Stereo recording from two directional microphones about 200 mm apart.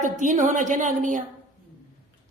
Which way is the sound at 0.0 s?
40° right (ahead or behind).